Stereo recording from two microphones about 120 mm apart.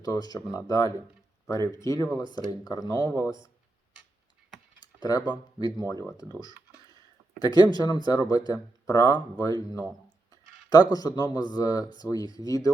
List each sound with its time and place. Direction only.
0.0 s speech: 35° left (ahead or behind)
4.8 s a sound: 35° left (ahead or behind)
5.3 s speech: 35° left (ahead or behind)
7.3 s speech: 35° left (ahead or behind)